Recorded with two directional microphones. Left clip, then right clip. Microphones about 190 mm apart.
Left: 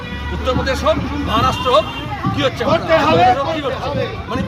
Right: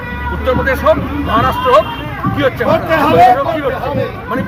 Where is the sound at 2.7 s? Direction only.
60° right (ahead or behind).